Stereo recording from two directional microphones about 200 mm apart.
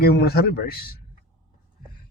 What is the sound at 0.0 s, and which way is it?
Speech, 50° left (ahead or behind).